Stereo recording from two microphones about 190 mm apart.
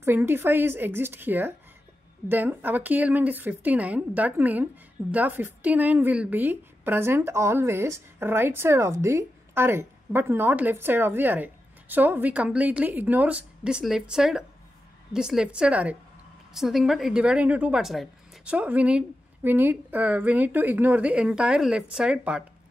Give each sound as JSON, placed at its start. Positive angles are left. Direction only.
{"t": 0.0, "sound": "a woman's voice", "side_deg": -10}